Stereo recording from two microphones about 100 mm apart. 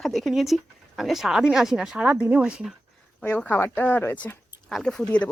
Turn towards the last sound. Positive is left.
turn(degrees=10)  # may be behind; listen again after turning